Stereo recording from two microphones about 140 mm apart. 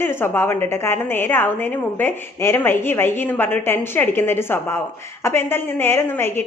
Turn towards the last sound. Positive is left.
turn(degrees=15)  # may be behind; listen again after turning